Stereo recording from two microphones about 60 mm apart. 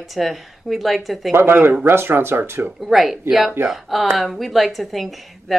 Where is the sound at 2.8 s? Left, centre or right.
Centre.